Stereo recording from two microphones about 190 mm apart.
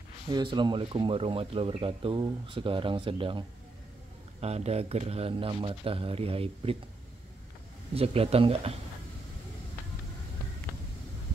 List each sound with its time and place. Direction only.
0.3 s speech: 25° right (ahead or behind)
7.9 s speech: 30° right (ahead or behind)